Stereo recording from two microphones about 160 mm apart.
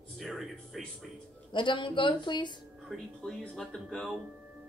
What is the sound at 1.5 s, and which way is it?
Speech, 30° left (ahead or behind).